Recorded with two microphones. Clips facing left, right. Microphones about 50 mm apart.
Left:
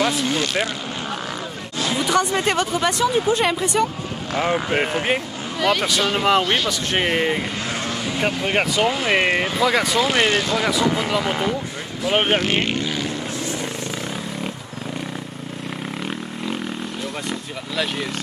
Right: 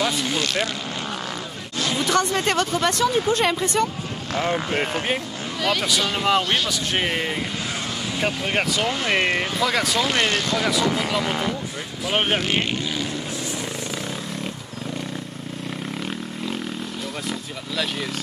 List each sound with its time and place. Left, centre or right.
2.0 s speech: centre
6.4 s speech: centre
7.0 s speech: left
8.2 s speech: centre
12.4 s speech: left
17.3 s vehicle: centre